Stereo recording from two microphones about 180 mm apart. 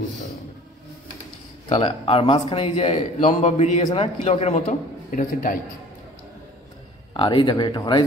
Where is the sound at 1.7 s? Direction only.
30° left (ahead or behind); by 5.6 s 50° left (ahead or behind).